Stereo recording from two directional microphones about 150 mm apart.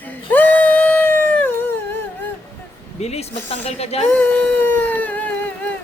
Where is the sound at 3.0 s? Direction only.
45° left (ahead or behind).